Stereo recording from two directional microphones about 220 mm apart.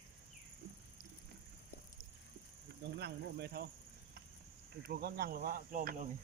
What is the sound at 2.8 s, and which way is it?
Speech, 50° right (ahead or behind).